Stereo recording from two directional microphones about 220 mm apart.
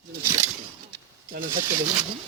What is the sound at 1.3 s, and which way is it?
Snake, 40° right (ahead or behind).